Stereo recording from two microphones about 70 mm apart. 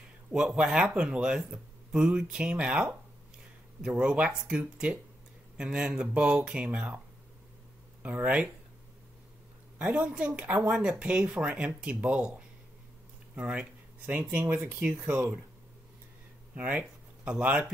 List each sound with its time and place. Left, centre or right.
0.6 s speech: centre
8.0 s speech: right
9.8 s speech: centre
14.6 s speech: centre
16.5 s speech: right